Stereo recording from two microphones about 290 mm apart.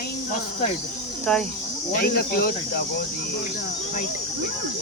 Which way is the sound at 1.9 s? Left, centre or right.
Left.